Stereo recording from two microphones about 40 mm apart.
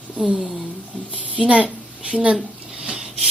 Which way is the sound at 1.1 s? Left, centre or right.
Right.